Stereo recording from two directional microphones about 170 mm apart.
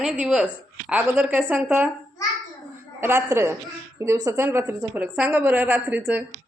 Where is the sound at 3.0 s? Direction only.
10° right (ahead or behind).